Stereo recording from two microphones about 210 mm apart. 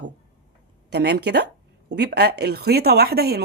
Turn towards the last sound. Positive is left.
turn(degrees=-50)  # may be behind; listen again after turning